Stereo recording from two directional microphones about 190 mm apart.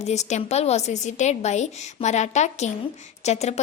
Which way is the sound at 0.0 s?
35° left (ahead or behind).